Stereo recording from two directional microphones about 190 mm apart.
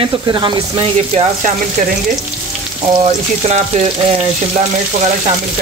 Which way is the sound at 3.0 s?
35° right (ahead or behind).